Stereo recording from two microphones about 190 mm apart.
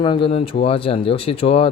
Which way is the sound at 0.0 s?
25° left (ahead or behind).